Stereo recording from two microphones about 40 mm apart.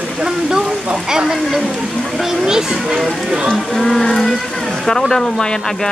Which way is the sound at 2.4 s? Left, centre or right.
Centre.